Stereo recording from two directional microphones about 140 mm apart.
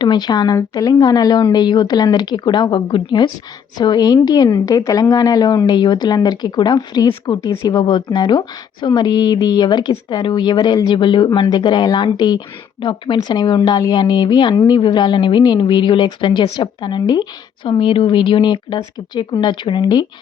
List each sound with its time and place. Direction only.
0.0 s a woman's voice: 30° left (ahead or behind)